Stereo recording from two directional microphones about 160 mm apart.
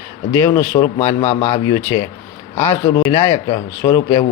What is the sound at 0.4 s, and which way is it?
Speech, 15° left (ahead or behind).